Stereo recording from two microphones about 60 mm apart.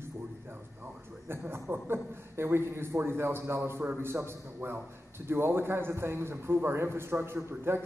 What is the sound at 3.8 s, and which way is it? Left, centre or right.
Speech, right.